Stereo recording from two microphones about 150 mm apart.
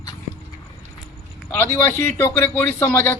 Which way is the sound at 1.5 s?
20° left (ahead or behind).